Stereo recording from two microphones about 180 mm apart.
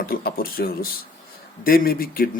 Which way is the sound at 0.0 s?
55° left (ahead or behind).